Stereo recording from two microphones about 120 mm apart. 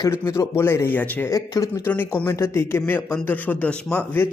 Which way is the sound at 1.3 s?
30° left (ahead or behind).